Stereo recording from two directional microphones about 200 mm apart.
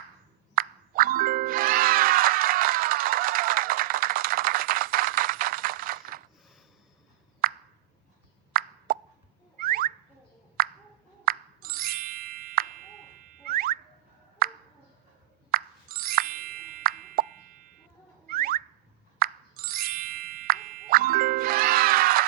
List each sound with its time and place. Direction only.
0.5 s music: 45° right (ahead or behind)
7.4 s plop: 50° right (ahead or behind)
9.6 s car alarm: 45° right (ahead or behind)
11.3 s music: 50° right (ahead or behind)
15.4 s plop: 50° right (ahead or behind)
18.3 s car alarm: 45° right (ahead or behind)
19.2 s plop: 50° right (ahead or behind)